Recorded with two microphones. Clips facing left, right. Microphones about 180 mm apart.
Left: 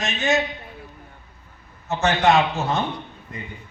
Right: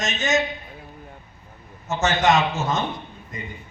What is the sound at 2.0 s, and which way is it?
Speech, 45° right (ahead or behind).